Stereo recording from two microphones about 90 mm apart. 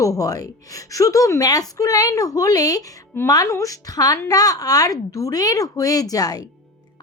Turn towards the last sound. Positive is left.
turn(degrees=45)  # may be behind; listen again after turning